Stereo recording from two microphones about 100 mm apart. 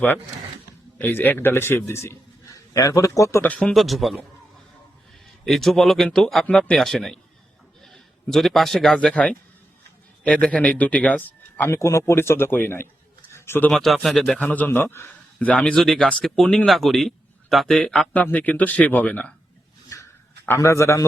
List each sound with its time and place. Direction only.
0.9 s a man's voice: 20° left (ahead or behind)
3.4 s speech: 15° left (ahead or behind)
3.8 s a man's voice: centre (ahead or behind)
5.5 s a man's voice: 5° left (ahead or behind)
11.7 s a man's voice: 30° left (ahead or behind)
13.3 s a sound: 25° left (ahead or behind)
13.7 s a man's voice: 5° left (ahead or behind)
14.3 s a man's voice: 15° left (ahead or behind)
20.6 s speech: 30° left (ahead or behind)